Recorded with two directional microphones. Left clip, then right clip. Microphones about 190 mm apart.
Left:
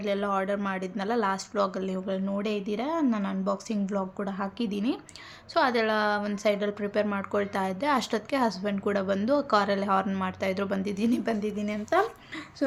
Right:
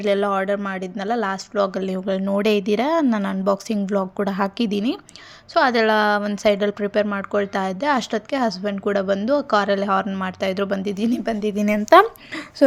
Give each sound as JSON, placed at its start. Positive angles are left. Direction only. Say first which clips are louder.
{"t": 0.0, "sound": "speech", "louder": "right 8 dB", "side_deg": -35}
{"t": 11.4, "sound": "a woman's voice", "louder": "right 12 dB", "side_deg": -45}